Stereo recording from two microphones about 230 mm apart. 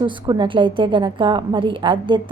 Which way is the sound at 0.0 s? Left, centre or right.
Centre.